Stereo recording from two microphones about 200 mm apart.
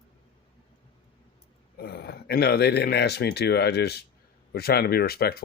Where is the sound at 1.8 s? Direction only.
50° left (ahead or behind).